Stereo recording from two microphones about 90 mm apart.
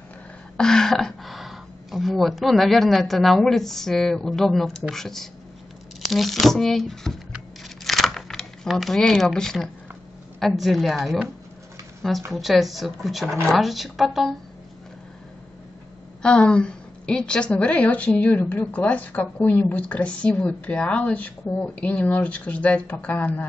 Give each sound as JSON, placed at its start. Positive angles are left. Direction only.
{"t": 0.6, "sound": "speech", "side_deg": 5}
{"t": 7.8, "sound": "a sound", "side_deg": 0}
{"t": 10.4, "sound": "speech", "side_deg": 0}
{"t": 12.3, "sound": "speech", "side_deg": 0}
{"t": 16.2, "sound": "a woman's voice", "side_deg": 10}